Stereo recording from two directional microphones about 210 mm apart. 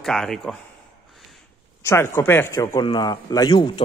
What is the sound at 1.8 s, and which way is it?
Speech, 15° left (ahead or behind).